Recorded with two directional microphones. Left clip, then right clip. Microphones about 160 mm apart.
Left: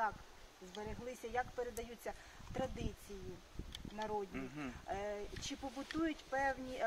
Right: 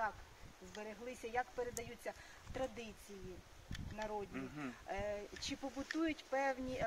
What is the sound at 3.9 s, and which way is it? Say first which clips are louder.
Speech: left 2 dB; 25° right (ahead or behind).